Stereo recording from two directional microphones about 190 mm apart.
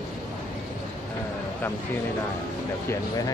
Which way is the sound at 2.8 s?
20° left (ahead or behind).